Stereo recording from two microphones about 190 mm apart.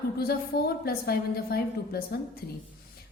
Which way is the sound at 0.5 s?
55° left (ahead or behind).